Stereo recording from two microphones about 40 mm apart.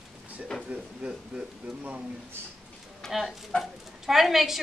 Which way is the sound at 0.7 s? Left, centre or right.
Right.